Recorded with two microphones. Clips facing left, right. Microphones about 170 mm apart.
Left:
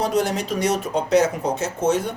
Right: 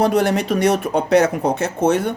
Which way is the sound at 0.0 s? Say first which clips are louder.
Right 5 dB; 60° right (ahead or behind).